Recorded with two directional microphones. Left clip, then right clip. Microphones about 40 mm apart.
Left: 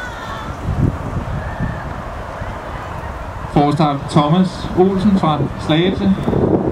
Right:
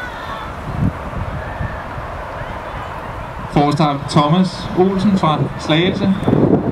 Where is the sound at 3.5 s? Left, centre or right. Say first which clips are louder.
Even; right.